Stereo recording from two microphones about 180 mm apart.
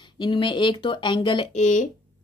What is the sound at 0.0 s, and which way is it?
Speech, 25° left (ahead or behind).